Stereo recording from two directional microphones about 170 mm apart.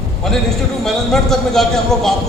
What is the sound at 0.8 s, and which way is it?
A man's voice, centre (ahead or behind).